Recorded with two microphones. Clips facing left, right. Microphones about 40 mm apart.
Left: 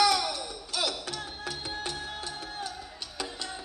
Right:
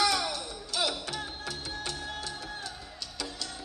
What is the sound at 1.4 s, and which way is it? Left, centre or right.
Music, left.